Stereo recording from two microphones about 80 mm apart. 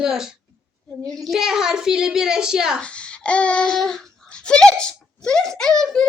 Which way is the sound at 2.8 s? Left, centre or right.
Centre.